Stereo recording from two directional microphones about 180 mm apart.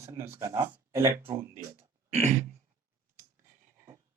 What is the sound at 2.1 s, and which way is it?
Throat clearing, 40° right (ahead or behind).